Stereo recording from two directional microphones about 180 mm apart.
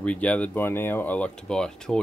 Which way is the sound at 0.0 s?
5° left (ahead or behind).